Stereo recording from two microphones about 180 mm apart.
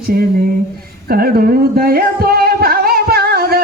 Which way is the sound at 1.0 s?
60° right (ahead or behind).